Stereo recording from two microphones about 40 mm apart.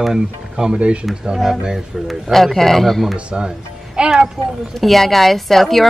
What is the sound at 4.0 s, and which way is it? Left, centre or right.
Speech, right.